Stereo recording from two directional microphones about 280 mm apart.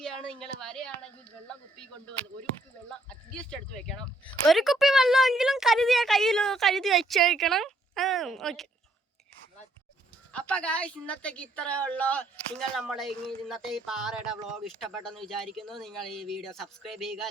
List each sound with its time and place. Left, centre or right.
0.0 s speech: centre
3.1 s speech: centre
10.3 s speech: centre